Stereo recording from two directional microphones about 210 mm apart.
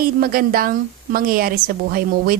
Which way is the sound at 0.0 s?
45° right (ahead or behind).